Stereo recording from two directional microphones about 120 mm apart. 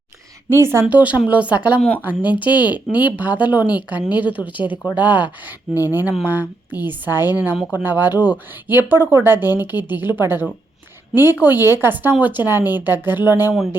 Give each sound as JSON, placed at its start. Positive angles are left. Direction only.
{"t": 0.5, "sound": "speech", "side_deg": -20}
{"t": 2.9, "sound": "speech", "side_deg": 40}
{"t": 3.2, "sound": "speech", "side_deg": -15}